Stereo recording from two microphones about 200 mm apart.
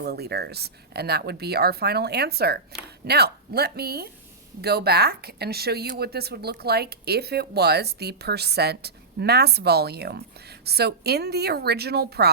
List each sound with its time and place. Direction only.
0.0 s speech: 55° right (ahead or behind)